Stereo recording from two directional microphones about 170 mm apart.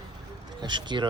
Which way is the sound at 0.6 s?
25° right (ahead or behind).